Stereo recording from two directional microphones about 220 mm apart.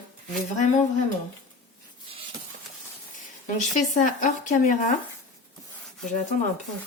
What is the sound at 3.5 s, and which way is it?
Speech, 35° left (ahead or behind).